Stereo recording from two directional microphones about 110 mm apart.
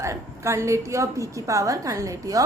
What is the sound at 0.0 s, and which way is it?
A woman's voice, 25° right (ahead or behind).